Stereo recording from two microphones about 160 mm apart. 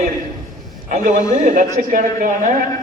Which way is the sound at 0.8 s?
55° right (ahead or behind).